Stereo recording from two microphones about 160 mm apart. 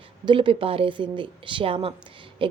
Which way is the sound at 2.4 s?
30° right (ahead or behind).